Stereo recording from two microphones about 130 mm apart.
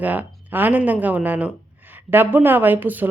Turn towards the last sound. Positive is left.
turn(degrees=-15)  # may be behind; listen again after turning